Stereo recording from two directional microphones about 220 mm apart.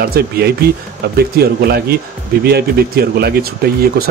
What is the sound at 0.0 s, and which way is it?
Speech, 45° right (ahead or behind).